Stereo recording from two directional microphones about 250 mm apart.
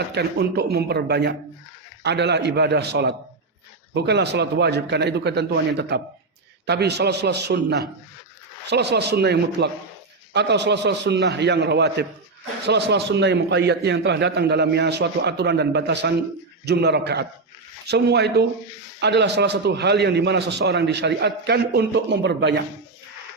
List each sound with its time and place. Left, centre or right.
0.1 s a man's voice: right